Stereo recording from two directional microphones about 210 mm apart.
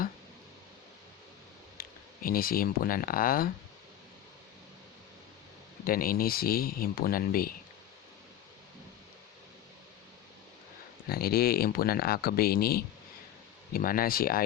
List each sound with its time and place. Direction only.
1.8 s speech: 45° left (ahead or behind)
5.8 s speech: 45° left (ahead or behind)
11.1 s speech: 45° left (ahead or behind)